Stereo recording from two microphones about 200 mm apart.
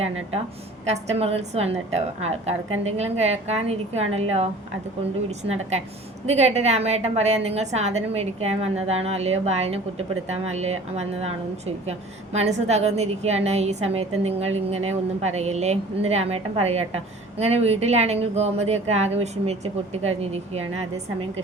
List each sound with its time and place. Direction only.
0.9 s a woman's voice: 30° right (ahead or behind)
6.2 s a woman's voice: 35° right (ahead or behind)